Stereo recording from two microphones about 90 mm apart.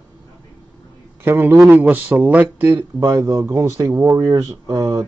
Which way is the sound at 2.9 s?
40° right (ahead or behind).